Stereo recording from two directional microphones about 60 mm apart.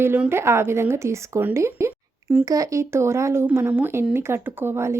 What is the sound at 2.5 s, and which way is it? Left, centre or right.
Speech, right.